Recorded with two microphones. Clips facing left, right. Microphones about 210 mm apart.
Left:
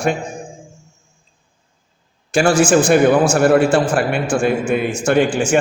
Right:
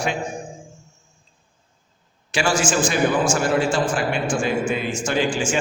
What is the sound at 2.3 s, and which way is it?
A man's voice, 50° left (ahead or behind).